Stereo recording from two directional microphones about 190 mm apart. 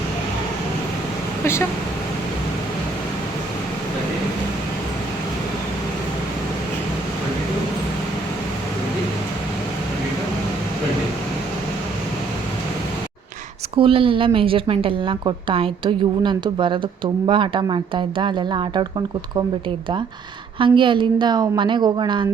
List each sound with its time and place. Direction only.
13.7 s a woman's voice: 30° right (ahead or behind)
20.6 s a woman's voice: 25° right (ahead or behind)